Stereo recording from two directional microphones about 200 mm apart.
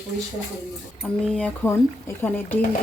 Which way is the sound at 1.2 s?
5° left (ahead or behind).